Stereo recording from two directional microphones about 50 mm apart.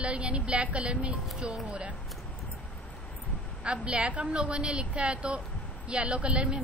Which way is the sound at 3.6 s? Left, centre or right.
Right.